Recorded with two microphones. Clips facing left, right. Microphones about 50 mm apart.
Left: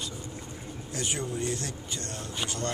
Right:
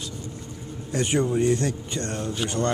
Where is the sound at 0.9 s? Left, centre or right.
Right.